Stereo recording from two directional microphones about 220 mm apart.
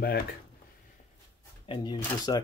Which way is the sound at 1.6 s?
20° left (ahead or behind).